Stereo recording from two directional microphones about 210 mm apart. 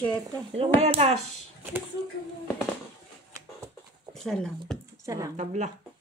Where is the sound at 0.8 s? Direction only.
30° right (ahead or behind).